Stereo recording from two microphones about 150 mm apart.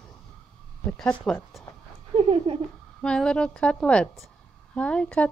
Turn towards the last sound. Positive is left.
turn(degrees=5)  # may be behind; listen again after turning